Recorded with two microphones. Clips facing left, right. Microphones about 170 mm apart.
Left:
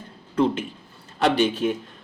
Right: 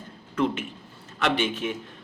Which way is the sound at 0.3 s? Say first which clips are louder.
Left 4 dB; 35° left (ahead or behind).